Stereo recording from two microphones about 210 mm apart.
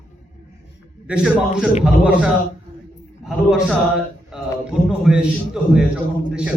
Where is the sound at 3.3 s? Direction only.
Centre (ahead or behind).